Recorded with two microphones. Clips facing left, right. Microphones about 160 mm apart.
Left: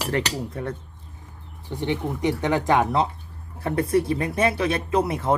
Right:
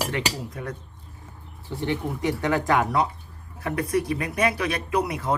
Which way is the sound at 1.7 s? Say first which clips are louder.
Left 1 dB; 20° left (ahead or behind).